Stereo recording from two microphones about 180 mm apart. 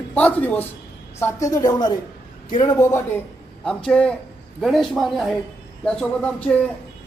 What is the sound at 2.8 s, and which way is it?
A man's voice, 15° left (ahead or behind).